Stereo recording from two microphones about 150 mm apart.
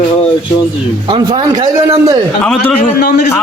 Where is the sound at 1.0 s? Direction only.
30° right (ahead or behind).